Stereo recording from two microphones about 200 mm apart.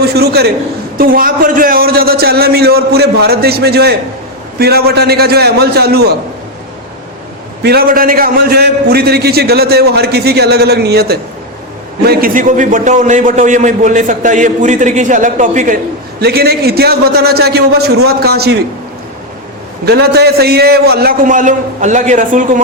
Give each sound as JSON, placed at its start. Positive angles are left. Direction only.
{"t": 0.0, "sound": "a man's voice", "side_deg": -50}
{"t": 7.6, "sound": "a man's voice", "side_deg": -50}
{"t": 16.2, "sound": "a man's voice", "side_deg": -50}
{"t": 19.8, "sound": "a man's voice", "side_deg": -55}